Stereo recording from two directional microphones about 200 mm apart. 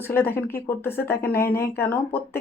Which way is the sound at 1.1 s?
50° left (ahead or behind).